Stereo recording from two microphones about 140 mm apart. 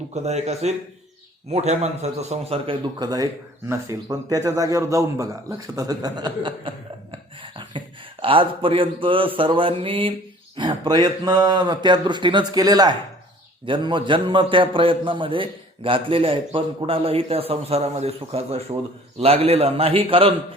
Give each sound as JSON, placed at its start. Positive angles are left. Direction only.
{"t": 0.1, "sound": "a man's voice", "side_deg": -55}
{"t": 3.0, "sound": "a man's voice", "side_deg": -25}